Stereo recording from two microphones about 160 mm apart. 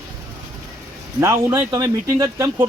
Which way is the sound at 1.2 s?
15° right (ahead or behind).